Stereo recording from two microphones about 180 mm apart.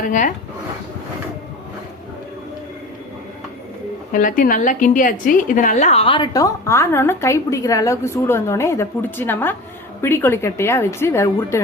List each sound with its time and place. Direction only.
0.1 s speech: 45° left (ahead or behind)
4.1 s a woman's voice: 50° left (ahead or behind); by 11.6 s 15° left (ahead or behind)